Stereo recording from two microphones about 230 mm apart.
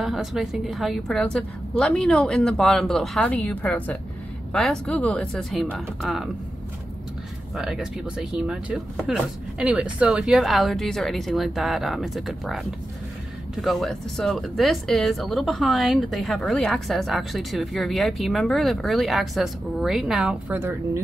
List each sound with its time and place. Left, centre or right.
0.0 s speech: centre
7.5 s speech: centre